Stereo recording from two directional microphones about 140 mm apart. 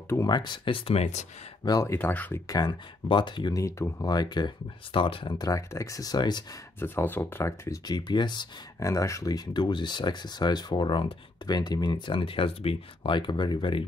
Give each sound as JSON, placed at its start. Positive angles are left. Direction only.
{"t": 0.1, "sound": "speech", "side_deg": 30}
{"t": 1.6, "sound": "speech", "side_deg": 30}
{"t": 1.9, "sound": "speech", "side_deg": 15}
{"t": 2.4, "sound": "speech", "side_deg": 30}
{"t": 6.8, "sound": "speech", "side_deg": 15}